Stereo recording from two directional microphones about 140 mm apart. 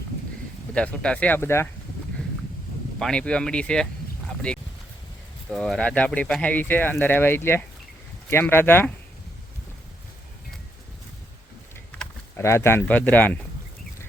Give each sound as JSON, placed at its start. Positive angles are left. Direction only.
{"t": 0.7, "sound": "speech", "side_deg": 5}
{"t": 3.0, "sound": "speech", "side_deg": 5}
{"t": 4.5, "sound": "a sound", "side_deg": 5}
{"t": 5.5, "sound": "speech", "side_deg": 5}
{"t": 12.4, "sound": "speech", "side_deg": 20}